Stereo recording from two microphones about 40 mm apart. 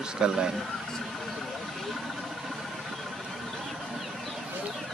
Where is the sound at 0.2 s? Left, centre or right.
Centre.